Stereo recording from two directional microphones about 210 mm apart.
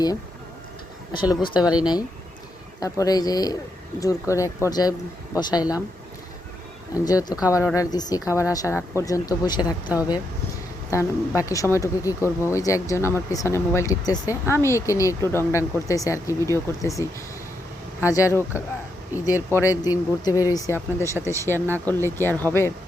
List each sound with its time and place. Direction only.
1.1 s speech: 20° left (ahead or behind)
6.9 s speech: 15° left (ahead or behind)
11.3 s speech: 15° left (ahead or behind)
18.1 s speech: 15° left (ahead or behind)